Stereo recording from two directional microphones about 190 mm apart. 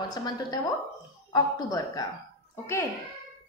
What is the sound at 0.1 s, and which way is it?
A woman's voice, 20° left (ahead or behind).